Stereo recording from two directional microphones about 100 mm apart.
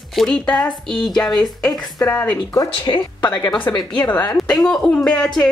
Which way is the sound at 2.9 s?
45° left (ahead or behind).